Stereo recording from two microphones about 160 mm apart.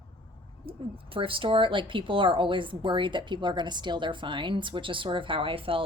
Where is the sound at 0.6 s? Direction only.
35° right (ahead or behind).